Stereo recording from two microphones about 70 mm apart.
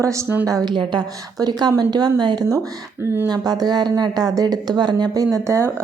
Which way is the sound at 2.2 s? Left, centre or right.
Right.